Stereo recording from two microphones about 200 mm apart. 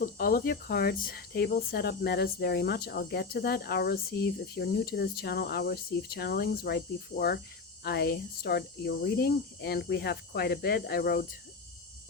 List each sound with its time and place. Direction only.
0.0 s speech: 45° left (ahead or behind)